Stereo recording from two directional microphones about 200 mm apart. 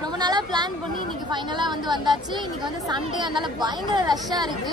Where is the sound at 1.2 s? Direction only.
20° right (ahead or behind).